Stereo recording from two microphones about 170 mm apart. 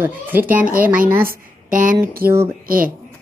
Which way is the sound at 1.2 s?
55° right (ahead or behind).